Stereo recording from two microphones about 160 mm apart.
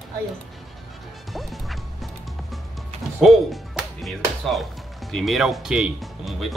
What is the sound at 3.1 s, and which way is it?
Speech, centre (ahead or behind).